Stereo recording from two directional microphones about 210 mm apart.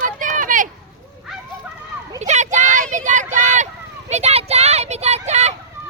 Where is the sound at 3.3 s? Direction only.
35° right (ahead or behind).